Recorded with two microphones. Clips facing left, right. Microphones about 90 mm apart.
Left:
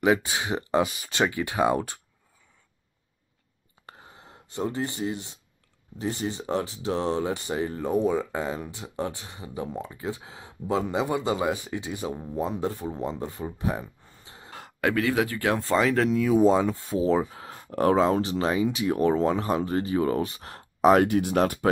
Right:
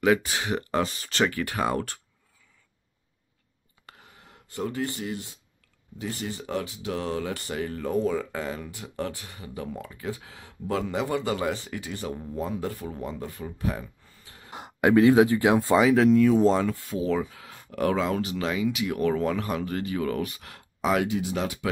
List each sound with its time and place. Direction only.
0.0 s speech: 20° left (ahead or behind)
3.8 s a sound: 30° left (ahead or behind)
5.9 s speech: 25° left (ahead or behind)
14.5 s speech: 20° right (ahead or behind); by 16.8 s 15° left (ahead or behind)
16.8 s speech: 30° left (ahead or behind); by 21.6 s 50° left (ahead or behind)